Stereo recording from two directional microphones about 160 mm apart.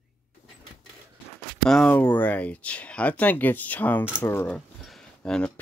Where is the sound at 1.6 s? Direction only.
5° left (ahead or behind).